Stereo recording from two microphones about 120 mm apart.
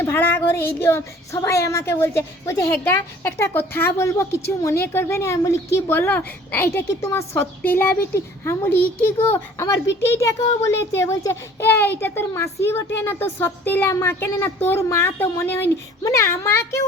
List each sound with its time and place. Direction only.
0.0 s a child's voice: 20° left (ahead or behind)